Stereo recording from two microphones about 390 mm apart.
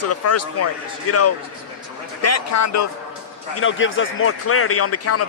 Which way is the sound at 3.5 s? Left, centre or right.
Left.